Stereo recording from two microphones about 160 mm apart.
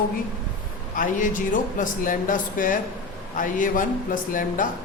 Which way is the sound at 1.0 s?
55° left (ahead or behind).